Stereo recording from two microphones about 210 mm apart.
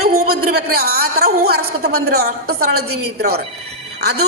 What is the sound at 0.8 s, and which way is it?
A man's voice, 50° right (ahead or behind).